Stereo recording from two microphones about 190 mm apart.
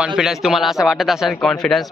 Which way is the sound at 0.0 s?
5° right (ahead or behind).